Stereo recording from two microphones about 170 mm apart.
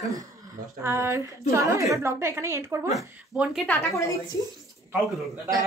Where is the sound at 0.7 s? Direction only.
15° right (ahead or behind).